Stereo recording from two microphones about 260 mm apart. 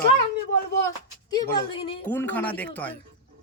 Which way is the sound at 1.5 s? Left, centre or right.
Centre.